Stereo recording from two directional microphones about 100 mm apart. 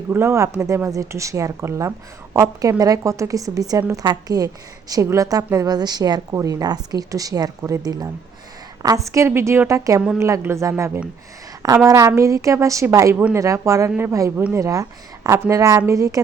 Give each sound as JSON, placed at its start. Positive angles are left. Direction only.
{"t": 0.1, "sound": "a woman's voice", "side_deg": -25}
{"t": 9.0, "sound": "a woman's voice", "side_deg": -30}
{"t": 13.1, "sound": "a woman's voice", "side_deg": -20}
{"t": 13.4, "sound": "a woman's voice", "side_deg": -30}
{"t": 14.3, "sound": "a woman's voice", "side_deg": -20}
{"t": 14.6, "sound": "a woman's voice", "side_deg": -35}